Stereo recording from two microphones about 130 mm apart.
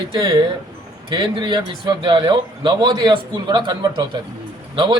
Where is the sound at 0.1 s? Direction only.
35° right (ahead or behind).